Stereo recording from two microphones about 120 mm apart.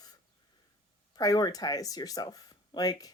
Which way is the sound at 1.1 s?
30° left (ahead or behind).